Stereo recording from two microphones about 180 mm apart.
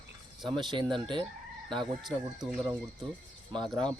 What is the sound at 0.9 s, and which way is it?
Speech, 25° right (ahead or behind).